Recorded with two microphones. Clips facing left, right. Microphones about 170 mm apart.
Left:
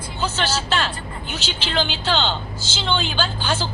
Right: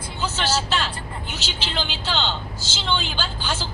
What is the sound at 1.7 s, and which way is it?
A woman's voice, 60° left (ahead or behind).